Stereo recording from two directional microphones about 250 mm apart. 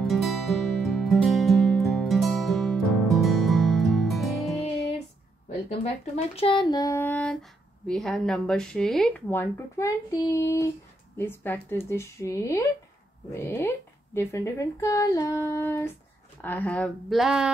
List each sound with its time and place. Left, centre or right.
0.0 s music: centre
5.7 s a woman's voice: left; by 17.5 s centre